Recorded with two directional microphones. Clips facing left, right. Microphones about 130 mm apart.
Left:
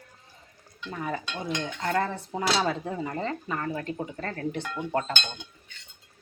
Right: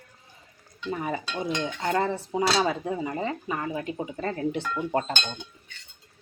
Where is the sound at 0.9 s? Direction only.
15° right (ahead or behind).